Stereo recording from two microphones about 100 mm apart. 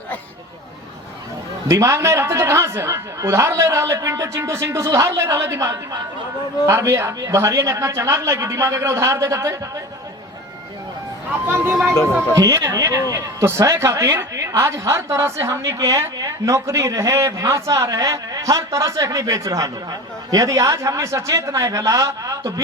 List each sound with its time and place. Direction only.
1.6 s speech: 30° right (ahead or behind)
11.4 s speech: 20° right (ahead or behind)
12.3 s speech: 35° right (ahead or behind)